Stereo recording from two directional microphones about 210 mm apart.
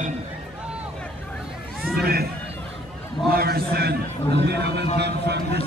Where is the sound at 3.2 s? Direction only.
45° right (ahead or behind).